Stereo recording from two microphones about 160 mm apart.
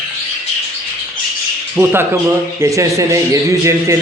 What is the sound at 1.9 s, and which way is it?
Speech, 15° right (ahead or behind).